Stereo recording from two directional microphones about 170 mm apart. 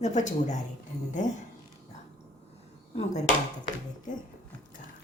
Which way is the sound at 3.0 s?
45° left (ahead or behind).